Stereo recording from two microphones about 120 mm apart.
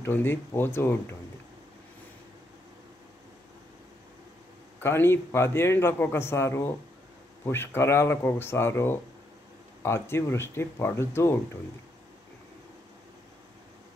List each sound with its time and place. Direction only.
0.0 s a man's voice: 20° left (ahead or behind)
4.8 s a man's voice: 20° left (ahead or behind)